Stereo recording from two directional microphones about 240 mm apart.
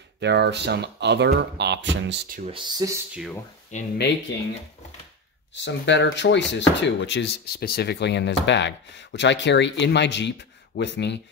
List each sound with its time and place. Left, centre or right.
0.2 s speech: right
2.3 s speech: right
3.7 s speech: left
5.5 s speech: left